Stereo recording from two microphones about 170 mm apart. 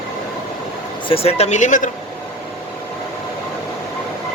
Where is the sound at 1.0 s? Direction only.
35° left (ahead or behind).